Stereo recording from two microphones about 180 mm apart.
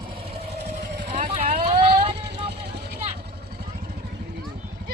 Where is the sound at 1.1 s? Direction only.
40° right (ahead or behind).